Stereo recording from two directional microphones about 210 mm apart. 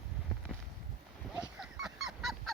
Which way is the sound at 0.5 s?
5° left (ahead or behind).